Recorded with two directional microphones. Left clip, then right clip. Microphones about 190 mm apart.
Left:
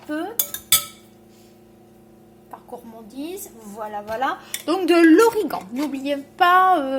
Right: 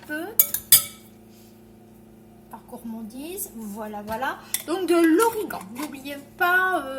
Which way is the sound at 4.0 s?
35° left (ahead or behind).